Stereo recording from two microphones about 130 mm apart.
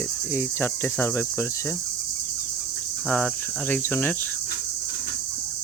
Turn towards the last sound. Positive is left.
turn(degrees=15)  # may be behind; listen again after turning